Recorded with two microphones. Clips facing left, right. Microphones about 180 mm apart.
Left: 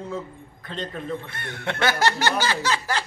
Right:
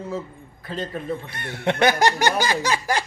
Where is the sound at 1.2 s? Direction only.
15° right (ahead or behind).